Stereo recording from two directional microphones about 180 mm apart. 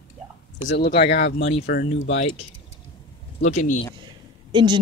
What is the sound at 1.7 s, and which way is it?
Speech, 60° left (ahead or behind).